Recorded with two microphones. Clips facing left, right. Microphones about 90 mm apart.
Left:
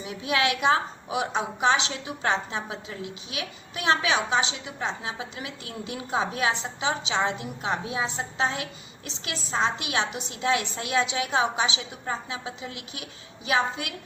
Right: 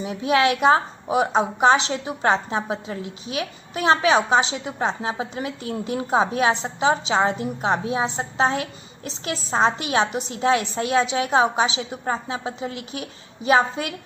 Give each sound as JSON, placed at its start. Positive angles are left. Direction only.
{"t": 0.0, "sound": "a woman's voice", "side_deg": -35}